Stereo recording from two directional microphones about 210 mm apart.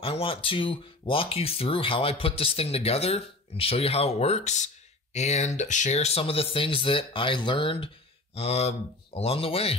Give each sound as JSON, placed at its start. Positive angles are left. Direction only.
{"t": 0.0, "sound": "speech", "side_deg": 25}